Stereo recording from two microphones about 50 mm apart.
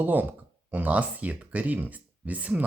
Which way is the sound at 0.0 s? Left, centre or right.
Right.